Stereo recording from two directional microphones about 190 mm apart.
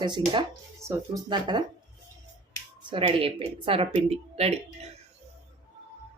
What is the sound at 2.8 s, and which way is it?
Speech, 30° right (ahead or behind).